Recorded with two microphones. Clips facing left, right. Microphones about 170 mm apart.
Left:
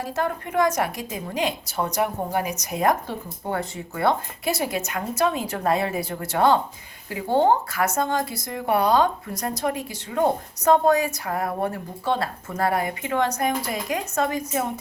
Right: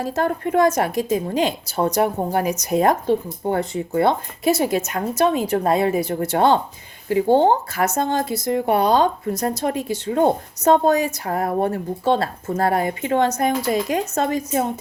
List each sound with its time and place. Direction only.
0.0 s speech: 30° right (ahead or behind)